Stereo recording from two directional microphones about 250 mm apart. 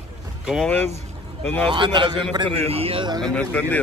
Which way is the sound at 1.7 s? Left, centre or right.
Centre.